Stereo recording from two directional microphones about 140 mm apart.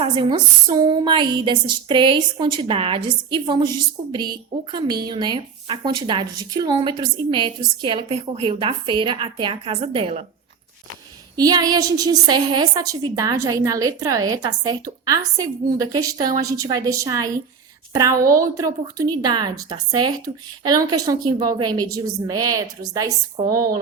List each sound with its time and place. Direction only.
0.0 s a woman's voice: 35° right (ahead or behind)
11.3 s a woman's voice: 30° right (ahead or behind)